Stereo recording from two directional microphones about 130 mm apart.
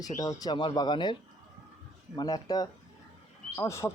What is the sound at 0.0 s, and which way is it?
Speech, 30° left (ahead or behind).